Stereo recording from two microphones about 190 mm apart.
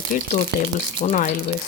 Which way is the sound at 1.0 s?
40° left (ahead or behind).